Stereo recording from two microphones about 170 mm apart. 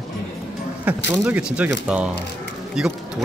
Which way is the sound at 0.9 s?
10° right (ahead or behind).